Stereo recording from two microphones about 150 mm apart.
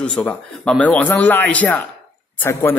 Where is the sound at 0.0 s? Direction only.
10° left (ahead or behind).